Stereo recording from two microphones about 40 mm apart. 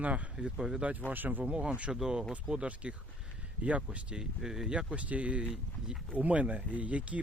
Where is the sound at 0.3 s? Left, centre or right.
Right.